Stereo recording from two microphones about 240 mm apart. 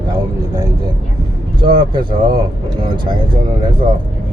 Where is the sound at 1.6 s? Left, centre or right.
Centre.